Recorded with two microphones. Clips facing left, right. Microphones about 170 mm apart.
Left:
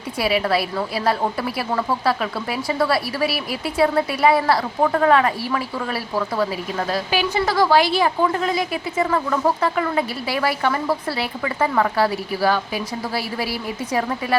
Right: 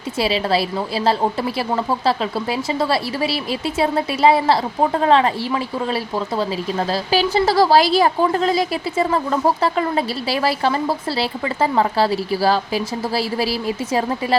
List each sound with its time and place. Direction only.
0.2 s a woman's voice: 25° right (ahead or behind)